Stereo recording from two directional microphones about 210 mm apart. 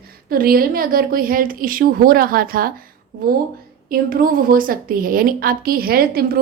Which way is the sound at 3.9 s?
45° right (ahead or behind).